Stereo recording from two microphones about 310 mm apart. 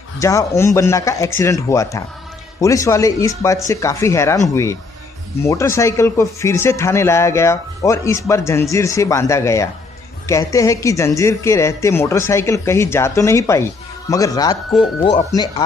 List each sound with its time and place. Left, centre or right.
0.2 s speech: centre
5.4 s speech: centre